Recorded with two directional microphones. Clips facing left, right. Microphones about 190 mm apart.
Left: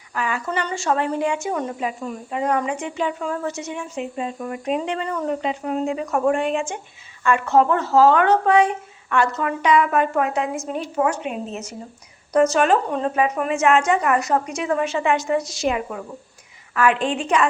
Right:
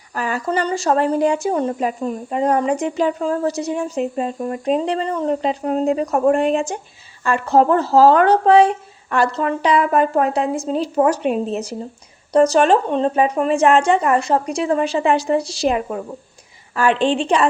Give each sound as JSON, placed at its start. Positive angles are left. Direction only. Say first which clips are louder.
{"t": 0.1, "sound": "a woman's voice", "louder": "right 4 dB", "side_deg": -40}